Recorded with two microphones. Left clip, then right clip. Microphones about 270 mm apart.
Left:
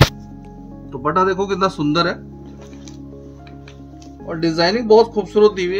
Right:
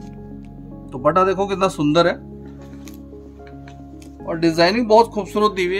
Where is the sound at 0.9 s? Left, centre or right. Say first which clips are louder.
Right 1 dB; right.